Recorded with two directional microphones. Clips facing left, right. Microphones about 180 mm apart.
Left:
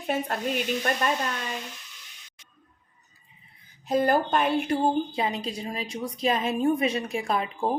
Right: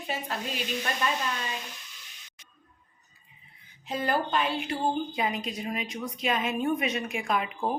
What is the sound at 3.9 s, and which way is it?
Speech, 45° left (ahead or behind).